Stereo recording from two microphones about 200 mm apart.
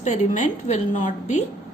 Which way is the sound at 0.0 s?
35° left (ahead or behind).